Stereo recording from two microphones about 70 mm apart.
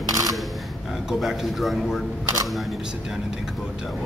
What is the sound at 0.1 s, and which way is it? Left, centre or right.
Camera, right.